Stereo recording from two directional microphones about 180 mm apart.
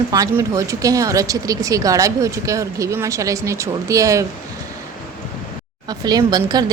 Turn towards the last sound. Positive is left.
turn(degrees=-20)  # may be behind; listen again after turning